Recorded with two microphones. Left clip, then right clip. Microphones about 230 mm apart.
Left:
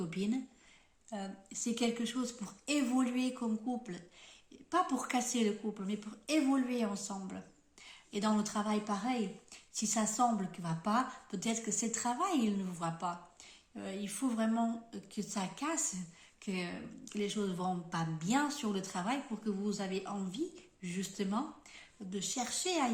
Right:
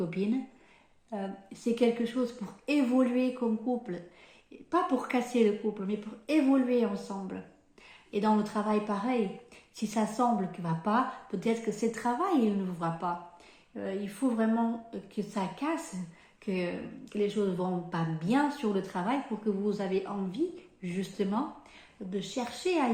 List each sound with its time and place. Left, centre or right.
0.1 s a woman's voice: left